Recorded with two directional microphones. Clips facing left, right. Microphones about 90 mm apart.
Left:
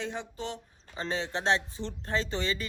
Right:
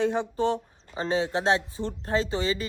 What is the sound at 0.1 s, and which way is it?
Speech, 45° right (ahead or behind).